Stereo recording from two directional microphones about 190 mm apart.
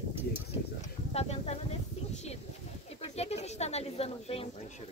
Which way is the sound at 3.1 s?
35° left (ahead or behind).